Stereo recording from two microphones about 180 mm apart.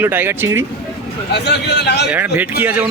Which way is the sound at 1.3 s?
70° left (ahead or behind).